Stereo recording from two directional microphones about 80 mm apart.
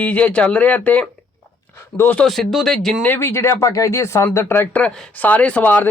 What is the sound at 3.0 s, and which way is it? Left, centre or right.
A man's voice, left.